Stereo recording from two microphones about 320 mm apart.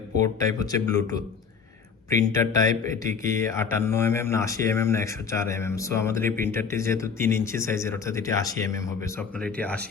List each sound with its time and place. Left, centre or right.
0.2 s speech: centre
2.6 s speech: right
3.2 s speech: centre